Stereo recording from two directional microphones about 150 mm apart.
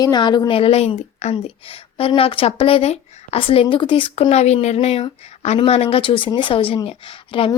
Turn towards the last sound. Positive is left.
turn(degrees=35)  # may be behind; listen again after turning